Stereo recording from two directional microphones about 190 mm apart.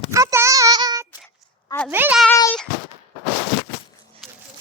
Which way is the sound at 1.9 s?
10° right (ahead or behind).